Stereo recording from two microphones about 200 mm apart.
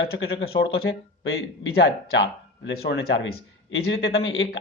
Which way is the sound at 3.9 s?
75° left (ahead or behind).